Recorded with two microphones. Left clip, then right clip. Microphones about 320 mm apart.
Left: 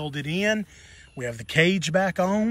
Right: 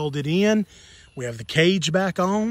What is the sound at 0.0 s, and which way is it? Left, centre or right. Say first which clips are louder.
Speech: right 4 dB; centre.